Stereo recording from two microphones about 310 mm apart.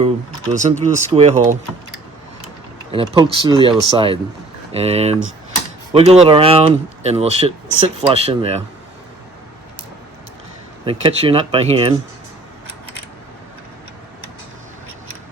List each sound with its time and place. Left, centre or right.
0.5 s speech: right
2.9 s speech: centre
10.8 s speech: centre